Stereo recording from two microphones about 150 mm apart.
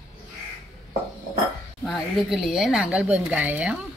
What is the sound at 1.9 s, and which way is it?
A woman's voice, centre (ahead or behind).